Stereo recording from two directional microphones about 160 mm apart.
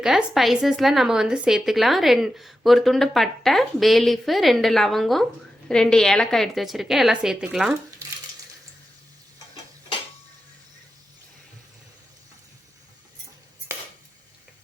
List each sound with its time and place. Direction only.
0.0 s a woman's voice: 5° right (ahead or behind)